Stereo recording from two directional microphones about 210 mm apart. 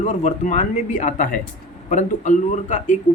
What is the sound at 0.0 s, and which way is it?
Speech, 35° left (ahead or behind).